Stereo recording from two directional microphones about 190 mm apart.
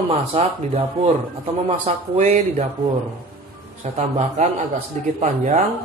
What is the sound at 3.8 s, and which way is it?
Speech, 40° right (ahead or behind).